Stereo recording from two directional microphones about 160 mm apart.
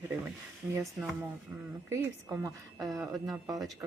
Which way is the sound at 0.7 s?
15° right (ahead or behind).